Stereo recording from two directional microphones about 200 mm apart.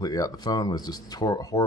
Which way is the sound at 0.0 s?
20° left (ahead or behind).